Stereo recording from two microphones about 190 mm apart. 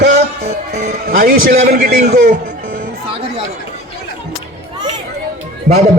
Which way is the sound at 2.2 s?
55° right (ahead or behind).